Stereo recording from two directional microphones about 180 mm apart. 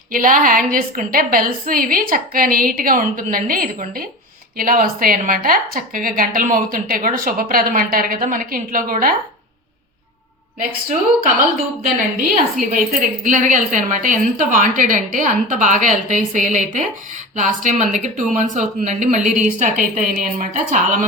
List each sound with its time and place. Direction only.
0.1 s a woman's voice: 50° right (ahead or behind)
12.3 s a woman's voice: 45° right (ahead or behind)